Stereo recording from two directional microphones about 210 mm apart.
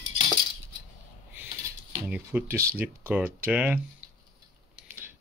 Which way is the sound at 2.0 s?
5° right (ahead or behind).